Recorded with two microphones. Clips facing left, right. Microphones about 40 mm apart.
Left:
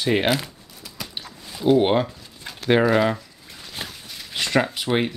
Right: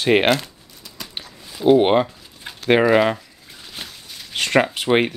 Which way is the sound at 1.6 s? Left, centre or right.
Centre.